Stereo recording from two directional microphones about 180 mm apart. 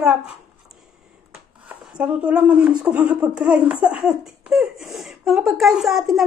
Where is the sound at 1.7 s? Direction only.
5° right (ahead or behind).